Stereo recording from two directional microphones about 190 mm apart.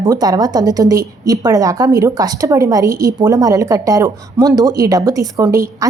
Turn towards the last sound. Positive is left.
turn(degrees=-15)  # may be behind; listen again after turning